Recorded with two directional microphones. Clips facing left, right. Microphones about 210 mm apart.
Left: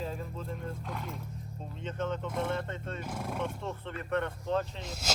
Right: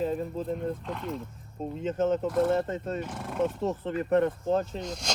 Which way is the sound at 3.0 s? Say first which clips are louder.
Right 4 dB; centre (ahead or behind).